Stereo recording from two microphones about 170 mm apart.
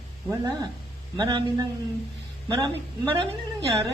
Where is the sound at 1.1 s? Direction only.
25° right (ahead or behind).